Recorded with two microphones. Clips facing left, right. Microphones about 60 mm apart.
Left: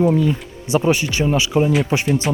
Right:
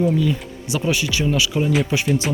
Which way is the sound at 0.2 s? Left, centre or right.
Left.